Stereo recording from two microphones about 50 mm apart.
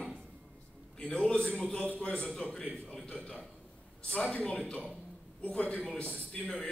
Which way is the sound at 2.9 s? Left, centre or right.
Centre.